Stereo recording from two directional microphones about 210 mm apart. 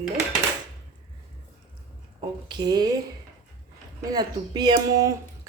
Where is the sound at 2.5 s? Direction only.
20° right (ahead or behind).